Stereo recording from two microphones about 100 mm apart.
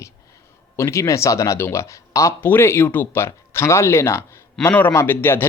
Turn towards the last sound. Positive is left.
turn(degrees=20)  # may be behind; listen again after turning